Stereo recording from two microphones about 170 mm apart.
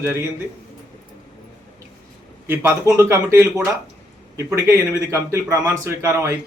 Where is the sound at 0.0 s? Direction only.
15° right (ahead or behind).